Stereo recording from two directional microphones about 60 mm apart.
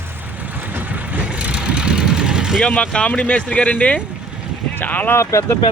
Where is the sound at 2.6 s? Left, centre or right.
Centre.